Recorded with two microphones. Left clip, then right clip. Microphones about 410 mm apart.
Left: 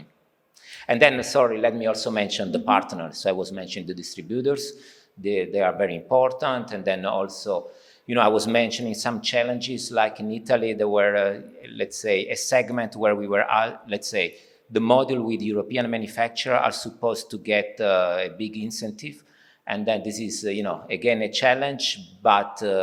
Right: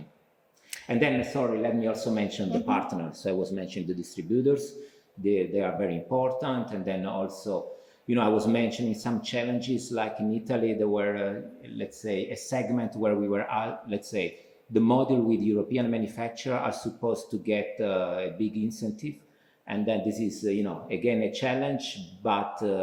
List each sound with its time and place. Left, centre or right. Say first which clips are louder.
0.9 s speech: left 8 dB; left
11.8 s speech: left 8 dB; left